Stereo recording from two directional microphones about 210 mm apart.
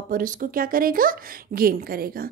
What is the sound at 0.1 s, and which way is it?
A woman's voice, 40° right (ahead or behind).